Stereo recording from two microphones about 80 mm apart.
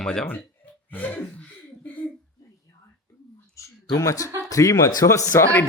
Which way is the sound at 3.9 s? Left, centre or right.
Left.